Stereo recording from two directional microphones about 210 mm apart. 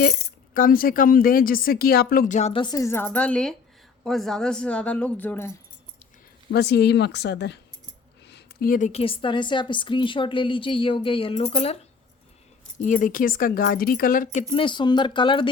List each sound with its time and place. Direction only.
0.0 s speech: 45° left (ahead or behind); by 5.5 s 10° left (ahead or behind)
6.5 s a woman's voice: 50° left (ahead or behind); by 11.8 s 30° left (ahead or behind)
12.8 s speech: 40° left (ahead or behind); by 15.4 s 25° left (ahead or behind)